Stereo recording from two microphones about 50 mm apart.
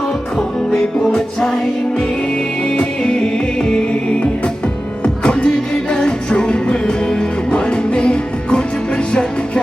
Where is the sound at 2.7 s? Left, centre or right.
Centre.